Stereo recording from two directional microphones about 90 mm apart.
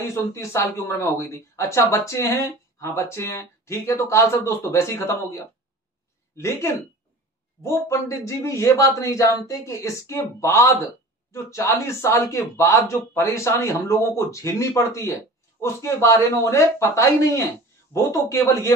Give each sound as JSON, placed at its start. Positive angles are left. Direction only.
{"t": 0.0, "sound": "speech", "side_deg": 30}